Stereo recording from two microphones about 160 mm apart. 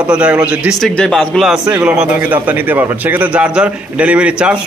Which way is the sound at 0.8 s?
5° left (ahead or behind).